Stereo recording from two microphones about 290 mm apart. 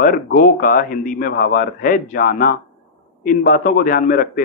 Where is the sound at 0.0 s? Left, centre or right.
Left.